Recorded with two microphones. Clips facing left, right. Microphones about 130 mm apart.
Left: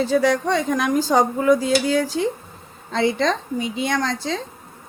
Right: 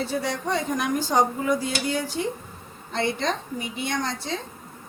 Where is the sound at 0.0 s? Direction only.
90° left.